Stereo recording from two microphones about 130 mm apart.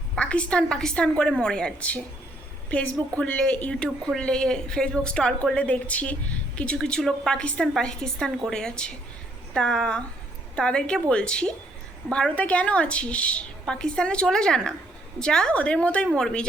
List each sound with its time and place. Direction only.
0.2 s a woman's voice: 10° left (ahead or behind)